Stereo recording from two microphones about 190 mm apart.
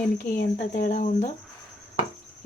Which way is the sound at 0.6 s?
45° left (ahead or behind).